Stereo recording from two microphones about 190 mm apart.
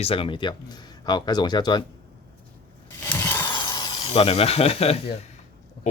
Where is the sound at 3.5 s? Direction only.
20° left (ahead or behind).